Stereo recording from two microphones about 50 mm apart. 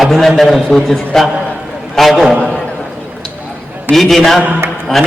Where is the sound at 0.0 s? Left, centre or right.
Centre.